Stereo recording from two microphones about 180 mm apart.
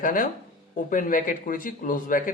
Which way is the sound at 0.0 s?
50° left (ahead or behind).